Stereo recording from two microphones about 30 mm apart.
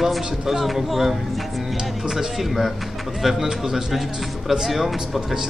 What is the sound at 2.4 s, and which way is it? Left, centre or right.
Speech, centre.